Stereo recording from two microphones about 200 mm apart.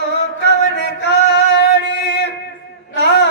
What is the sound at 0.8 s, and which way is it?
Male singing, 60° left (ahead or behind).